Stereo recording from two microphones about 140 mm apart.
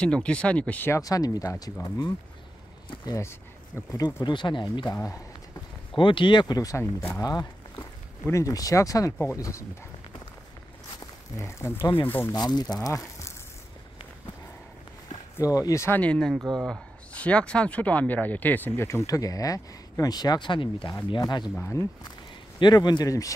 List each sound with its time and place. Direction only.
0.0 s speech: 5° left (ahead or behind); by 2.1 s 25° left (ahead or behind)
3.2 s speech: 20° left (ahead or behind)
11.3 s speech: 20° left (ahead or behind)
12.4 s speech: 30° left (ahead or behind)
15.3 s speech: 25° left (ahead or behind)
21.5 s speech: 20° left (ahead or behind)
22.6 s speech: 30° left (ahead or behind)